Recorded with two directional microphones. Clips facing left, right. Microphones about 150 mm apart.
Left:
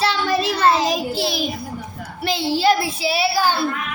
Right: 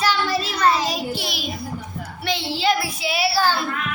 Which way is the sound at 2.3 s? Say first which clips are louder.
Left 4 dB; 40° left (ahead or behind).